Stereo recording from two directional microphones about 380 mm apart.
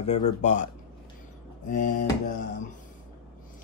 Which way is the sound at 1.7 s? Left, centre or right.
Centre.